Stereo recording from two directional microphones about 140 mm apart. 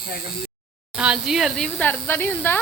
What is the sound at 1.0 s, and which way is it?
Speech, 5° right (ahead or behind).